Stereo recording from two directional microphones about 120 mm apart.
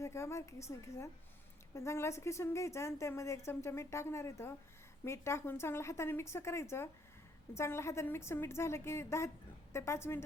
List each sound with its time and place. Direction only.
0.0 s a woman's voice: 25° left (ahead or behind)